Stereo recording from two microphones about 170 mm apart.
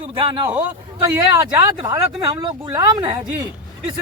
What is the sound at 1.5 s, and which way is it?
Speech, 25° right (ahead or behind).